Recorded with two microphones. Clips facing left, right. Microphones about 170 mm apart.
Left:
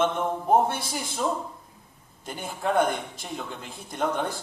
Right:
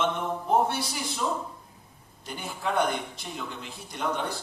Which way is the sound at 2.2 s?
50° left (ahead or behind).